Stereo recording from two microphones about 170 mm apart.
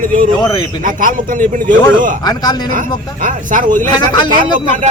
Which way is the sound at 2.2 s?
25° left (ahead or behind).